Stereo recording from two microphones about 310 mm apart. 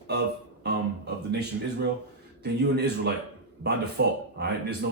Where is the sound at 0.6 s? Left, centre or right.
Right.